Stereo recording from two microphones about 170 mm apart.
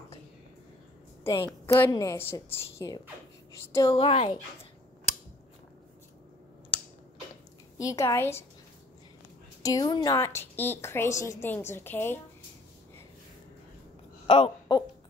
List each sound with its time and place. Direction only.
1.2 s a woman's voice: 15° left (ahead or behind)
4.0 s speech: 35° left (ahead or behind)
7.8 s a woman's voice: 20° left (ahead or behind)
9.6 s a woman's voice: 20° left (ahead or behind)
14.2 s speech: 35° left (ahead or behind)